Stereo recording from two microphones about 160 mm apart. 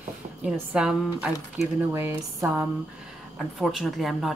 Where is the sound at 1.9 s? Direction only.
15° right (ahead or behind).